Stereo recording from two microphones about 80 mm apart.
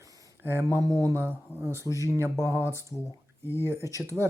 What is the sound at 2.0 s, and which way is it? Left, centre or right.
Speech, right.